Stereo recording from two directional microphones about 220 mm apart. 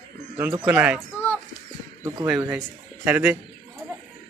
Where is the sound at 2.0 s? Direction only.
15° right (ahead or behind).